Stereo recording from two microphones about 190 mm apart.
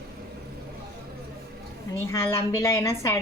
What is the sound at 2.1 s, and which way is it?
A woman's voice, 15° left (ahead or behind).